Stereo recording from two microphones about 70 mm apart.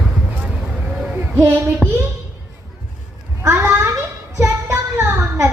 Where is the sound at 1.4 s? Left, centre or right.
Right.